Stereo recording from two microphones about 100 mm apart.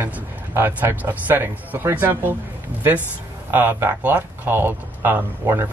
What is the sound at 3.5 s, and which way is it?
A man's voice, 20° right (ahead or behind).